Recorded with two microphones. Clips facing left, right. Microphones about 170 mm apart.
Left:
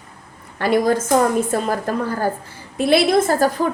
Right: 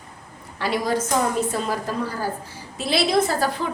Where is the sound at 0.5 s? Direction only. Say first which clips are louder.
Left 6 dB; 50° left (ahead or behind).